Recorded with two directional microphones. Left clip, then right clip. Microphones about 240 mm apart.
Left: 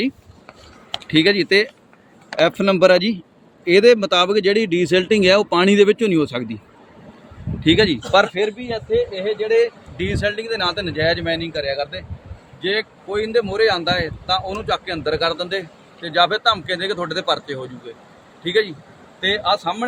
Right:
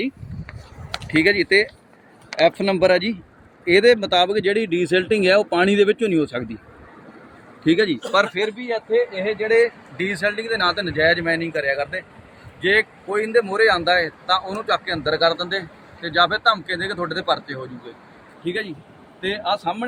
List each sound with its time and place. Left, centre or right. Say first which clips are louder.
1.0 s speech: left 1 dB; left
7.6 s speech: left 3 dB; left
8.7 s speech: right 3 dB; centre
9.2 s speech: left 1 dB; centre; by 17.6 s left
18.4 s a man's voice: left 7 dB; left